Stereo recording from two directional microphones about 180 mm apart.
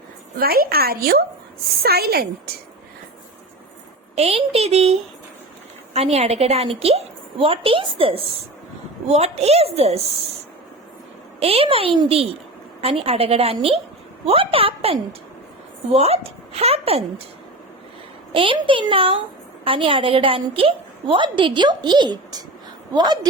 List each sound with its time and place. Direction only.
0.3 s a woman's voice: 55° right (ahead or behind)
4.1 s a woman's voice: 35° right (ahead or behind)
11.3 s a woman's voice: 35° right (ahead or behind)
18.3 s a woman's voice: 30° right (ahead or behind)